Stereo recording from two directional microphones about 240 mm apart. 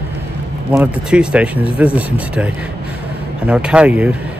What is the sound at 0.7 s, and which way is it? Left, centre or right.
Speech, centre.